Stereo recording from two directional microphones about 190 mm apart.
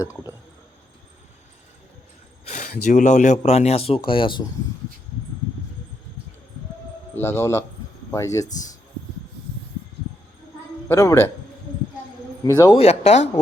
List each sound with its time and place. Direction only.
2.4 s speech: 35° left (ahead or behind)
7.2 s speech: 15° left (ahead or behind)
10.8 s speech: 15° left (ahead or behind)
12.5 s speech: 20° left (ahead or behind)
12.8 s speech: 35° left (ahead or behind)